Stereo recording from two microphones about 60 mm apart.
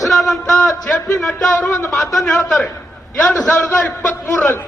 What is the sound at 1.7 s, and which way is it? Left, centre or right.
Speech, left.